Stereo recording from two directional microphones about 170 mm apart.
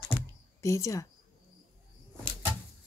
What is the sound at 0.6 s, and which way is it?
Speech, 20° left (ahead or behind).